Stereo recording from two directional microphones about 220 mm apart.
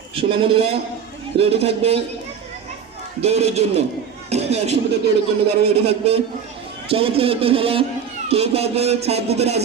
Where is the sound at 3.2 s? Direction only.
30° right (ahead or behind).